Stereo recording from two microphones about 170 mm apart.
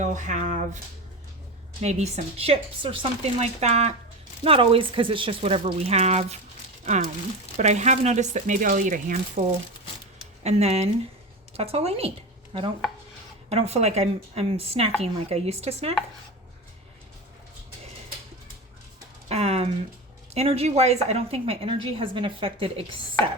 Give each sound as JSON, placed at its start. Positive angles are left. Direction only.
{"t": 0.0, "sound": "speech", "side_deg": -45}
{"t": 1.8, "sound": "a woman's voice", "side_deg": -40}
{"t": 10.4, "sound": "a woman's voice", "side_deg": -40}
{"t": 13.5, "sound": "a woman's voice", "side_deg": -40}
{"t": 19.3, "sound": "a sound", "side_deg": -40}
{"t": 20.3, "sound": "a woman's voice", "side_deg": -40}